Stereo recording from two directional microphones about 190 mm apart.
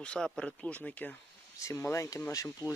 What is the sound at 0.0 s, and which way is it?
Speech, 5° left (ahead or behind).